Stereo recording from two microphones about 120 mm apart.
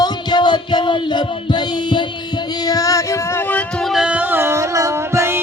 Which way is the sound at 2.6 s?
30° left (ahead or behind).